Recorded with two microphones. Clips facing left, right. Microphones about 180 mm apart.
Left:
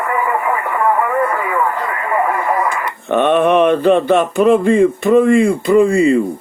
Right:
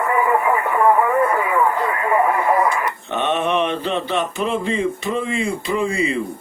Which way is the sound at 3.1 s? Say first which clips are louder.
Left 9 dB; 55° left (ahead or behind).